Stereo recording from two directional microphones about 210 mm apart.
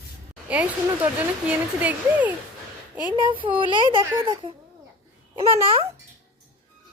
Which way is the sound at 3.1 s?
25° right (ahead or behind).